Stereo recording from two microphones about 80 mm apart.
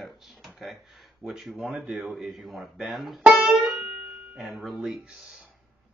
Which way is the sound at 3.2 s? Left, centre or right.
Centre.